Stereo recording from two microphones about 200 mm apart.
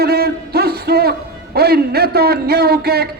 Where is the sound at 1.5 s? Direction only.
50° right (ahead or behind).